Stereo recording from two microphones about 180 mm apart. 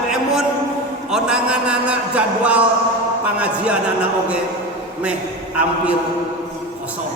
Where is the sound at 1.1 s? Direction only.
5° right (ahead or behind).